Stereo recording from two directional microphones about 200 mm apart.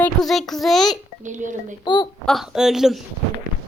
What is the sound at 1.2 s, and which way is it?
Speech, 40° right (ahead or behind).